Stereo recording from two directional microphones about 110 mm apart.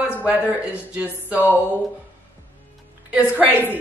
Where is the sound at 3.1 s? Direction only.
15° right (ahead or behind).